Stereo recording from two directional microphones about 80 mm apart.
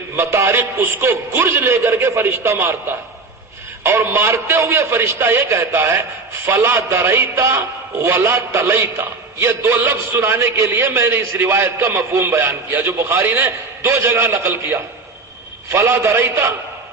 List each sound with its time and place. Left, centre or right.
0.2 s a man's voice: right
3.8 s a man's voice: right